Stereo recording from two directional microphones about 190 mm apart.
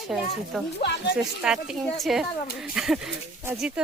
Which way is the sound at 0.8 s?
60° left (ahead or behind).